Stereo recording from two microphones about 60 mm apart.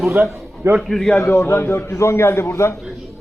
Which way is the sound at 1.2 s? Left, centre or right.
Left.